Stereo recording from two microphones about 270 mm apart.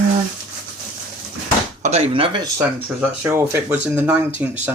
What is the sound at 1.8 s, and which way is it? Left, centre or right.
Speech, right.